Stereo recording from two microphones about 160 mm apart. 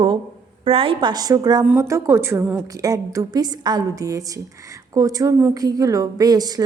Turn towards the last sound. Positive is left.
turn(degrees=-25)  # may be behind; listen again after turning